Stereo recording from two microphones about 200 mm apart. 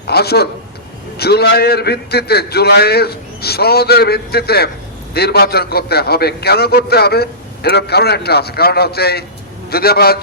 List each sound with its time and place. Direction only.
0.1 s a man's voice: 55° left (ahead or behind)